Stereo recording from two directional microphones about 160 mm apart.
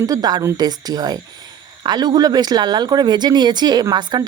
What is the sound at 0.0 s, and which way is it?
A woman's voice, 25° right (ahead or behind).